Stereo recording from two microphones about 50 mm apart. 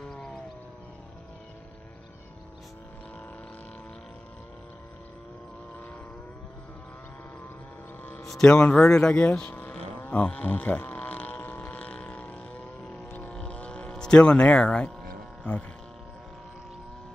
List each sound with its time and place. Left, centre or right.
0.0 s music: centre
8.3 s speech: centre
8.5 s speech: left
9.4 s speech: left
10.0 s a sound: left